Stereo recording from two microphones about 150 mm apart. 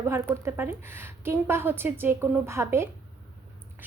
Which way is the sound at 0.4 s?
15° right (ahead or behind).